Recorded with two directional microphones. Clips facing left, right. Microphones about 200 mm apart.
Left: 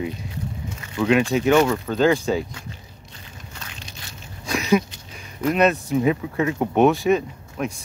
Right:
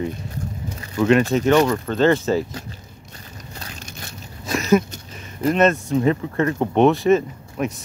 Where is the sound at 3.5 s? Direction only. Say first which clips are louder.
Right 4 dB; 40° right (ahead or behind).